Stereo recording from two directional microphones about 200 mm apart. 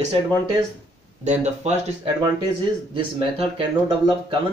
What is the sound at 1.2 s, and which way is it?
Speech, 35° right (ahead or behind).